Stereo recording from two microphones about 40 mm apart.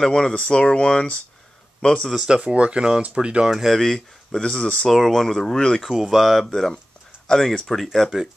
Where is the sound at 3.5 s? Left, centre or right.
Centre.